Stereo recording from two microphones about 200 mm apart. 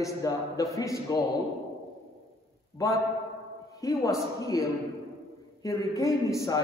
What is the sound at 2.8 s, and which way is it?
A man's voice, 20° left (ahead or behind).